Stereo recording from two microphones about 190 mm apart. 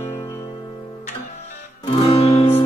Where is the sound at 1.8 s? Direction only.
30° left (ahead or behind).